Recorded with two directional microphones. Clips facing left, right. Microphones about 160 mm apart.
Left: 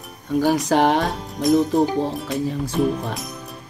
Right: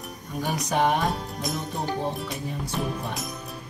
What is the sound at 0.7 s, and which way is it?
Speech, 90° left.